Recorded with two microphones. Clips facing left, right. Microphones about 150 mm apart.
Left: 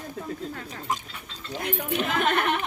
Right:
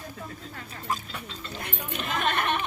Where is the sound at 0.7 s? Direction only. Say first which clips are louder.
Right 1 dB; 15° left (ahead or behind).